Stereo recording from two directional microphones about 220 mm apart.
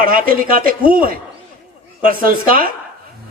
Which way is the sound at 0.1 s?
40° right (ahead or behind).